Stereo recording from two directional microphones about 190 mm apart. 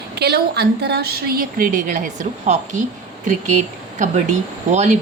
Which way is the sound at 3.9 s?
40° right (ahead or behind).